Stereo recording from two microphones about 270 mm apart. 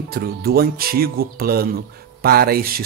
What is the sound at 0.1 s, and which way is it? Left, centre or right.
Speech, right.